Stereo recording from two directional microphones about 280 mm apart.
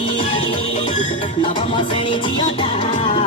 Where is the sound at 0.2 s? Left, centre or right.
Centre.